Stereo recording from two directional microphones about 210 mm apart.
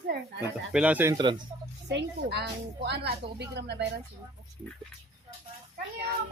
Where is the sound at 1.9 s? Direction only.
55° right (ahead or behind).